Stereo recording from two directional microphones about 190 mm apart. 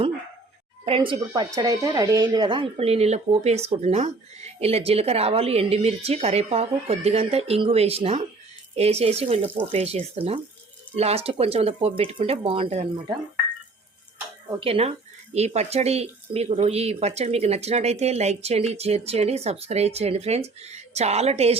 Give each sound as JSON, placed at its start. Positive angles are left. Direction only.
{"t": 0.9, "sound": "speech", "side_deg": -30}
{"t": 1.5, "sound": "speech", "side_deg": -15}
{"t": 14.6, "sound": "speech", "side_deg": -30}